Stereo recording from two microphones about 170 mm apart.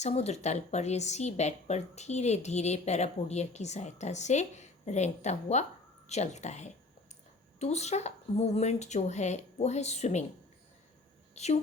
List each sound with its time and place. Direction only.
0.0 s a woman's voice: 40° left (ahead or behind)
11.3 s a woman's voice: 40° left (ahead or behind)